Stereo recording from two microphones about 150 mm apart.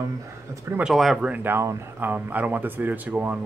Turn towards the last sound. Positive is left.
turn(degrees=-10)  # may be behind; listen again after turning